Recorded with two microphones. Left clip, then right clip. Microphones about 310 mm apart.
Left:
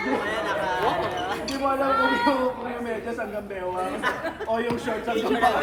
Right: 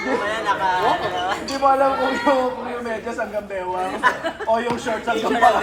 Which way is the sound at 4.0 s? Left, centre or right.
Right.